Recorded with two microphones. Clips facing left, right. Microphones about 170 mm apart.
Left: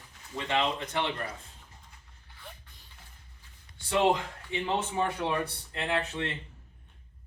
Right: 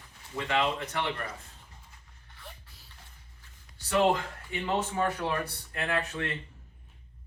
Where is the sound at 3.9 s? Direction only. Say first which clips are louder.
Even; 20° left (ahead or behind).